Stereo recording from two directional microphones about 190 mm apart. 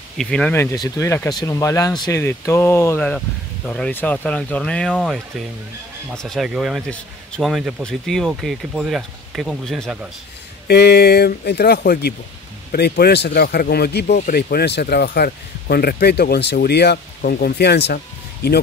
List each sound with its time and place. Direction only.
0.2 s speech: 5° left (ahead or behind)
10.7 s speech: 60° left (ahead or behind)